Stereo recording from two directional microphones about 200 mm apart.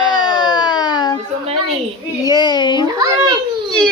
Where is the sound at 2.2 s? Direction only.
20° left (ahead or behind).